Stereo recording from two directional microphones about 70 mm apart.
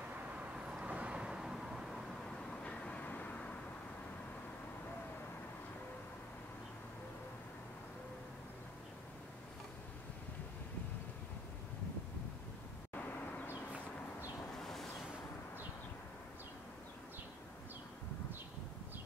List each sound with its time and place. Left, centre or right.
0.4 s vehicle: centre
2.3 s vehicle: centre
14.6 s a sound: centre